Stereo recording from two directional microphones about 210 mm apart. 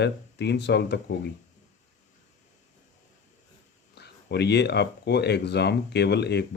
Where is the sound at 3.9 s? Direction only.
55° left (ahead or behind).